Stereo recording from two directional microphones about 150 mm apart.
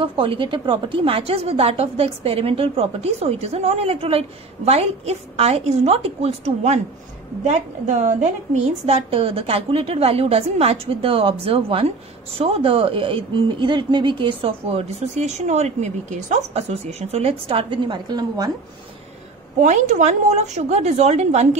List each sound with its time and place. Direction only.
0.0 s a woman's voice: 35° right (ahead or behind); by 8.2 s 55° right (ahead or behind)
8.8 s a woman's voice: 40° right (ahead or behind); by 18.5 s 25° right (ahead or behind)
19.6 s a woman's voice: 55° right (ahead or behind)